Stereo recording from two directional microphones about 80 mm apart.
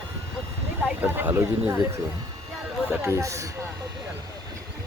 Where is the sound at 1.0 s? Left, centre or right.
Right.